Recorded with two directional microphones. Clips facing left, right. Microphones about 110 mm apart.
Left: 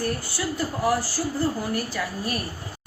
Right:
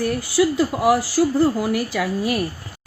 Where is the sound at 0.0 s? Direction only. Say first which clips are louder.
Right 9 dB; 90° right.